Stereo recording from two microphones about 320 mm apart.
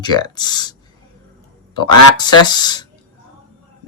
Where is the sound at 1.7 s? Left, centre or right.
Centre.